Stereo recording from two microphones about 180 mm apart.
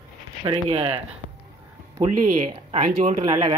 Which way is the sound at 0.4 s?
30° right (ahead or behind).